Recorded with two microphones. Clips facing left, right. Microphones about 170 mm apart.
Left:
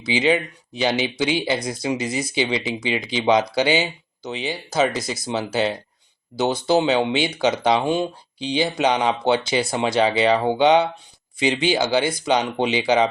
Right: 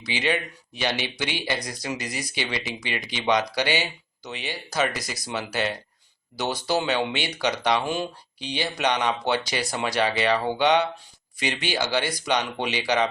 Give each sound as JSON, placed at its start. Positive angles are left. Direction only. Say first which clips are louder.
{"t": 0.9, "sound": "speech", "louder": "left 6 dB", "side_deg": 90}
{"t": 1.4, "sound": "speech", "louder": "left 6 dB", "side_deg": 25}